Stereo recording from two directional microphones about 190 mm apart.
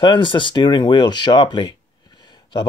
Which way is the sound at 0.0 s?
25° left (ahead or behind).